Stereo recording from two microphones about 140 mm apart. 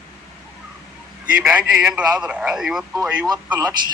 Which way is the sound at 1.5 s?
5° right (ahead or behind).